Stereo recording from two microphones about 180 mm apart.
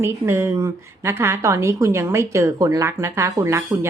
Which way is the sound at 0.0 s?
15° right (ahead or behind).